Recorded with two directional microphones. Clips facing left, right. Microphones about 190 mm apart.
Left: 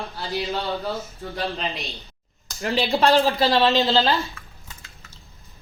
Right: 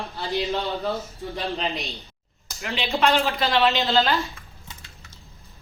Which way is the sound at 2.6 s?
35° left (ahead or behind).